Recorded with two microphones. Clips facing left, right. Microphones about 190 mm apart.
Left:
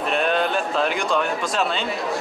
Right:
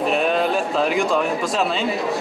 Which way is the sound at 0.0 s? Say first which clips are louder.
Right 2 dB; centre (ahead or behind).